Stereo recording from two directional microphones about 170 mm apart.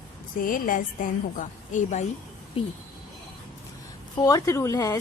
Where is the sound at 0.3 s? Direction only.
55° left (ahead or behind).